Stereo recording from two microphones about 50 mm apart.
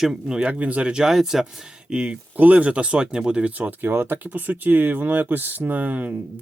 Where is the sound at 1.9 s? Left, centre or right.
Centre.